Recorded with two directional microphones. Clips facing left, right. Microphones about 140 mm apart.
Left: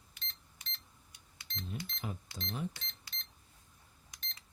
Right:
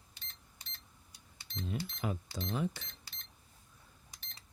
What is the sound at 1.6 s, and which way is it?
Speech, 85° right.